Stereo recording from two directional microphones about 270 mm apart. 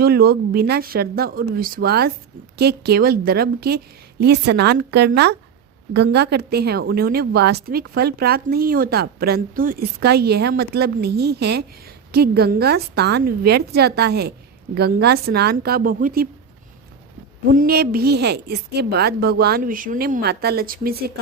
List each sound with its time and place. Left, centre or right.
0.0 s speech: right
17.5 s speech: right